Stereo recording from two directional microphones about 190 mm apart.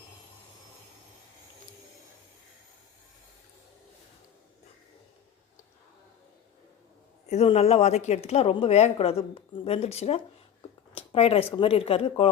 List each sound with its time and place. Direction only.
7.3 s a woman's voice: 35° left (ahead or behind)